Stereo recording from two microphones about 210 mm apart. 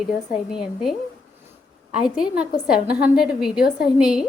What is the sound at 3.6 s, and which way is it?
Speech, 50° left (ahead or behind).